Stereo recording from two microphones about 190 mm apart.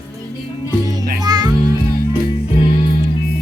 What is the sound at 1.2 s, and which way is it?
Music, 20° right (ahead or behind).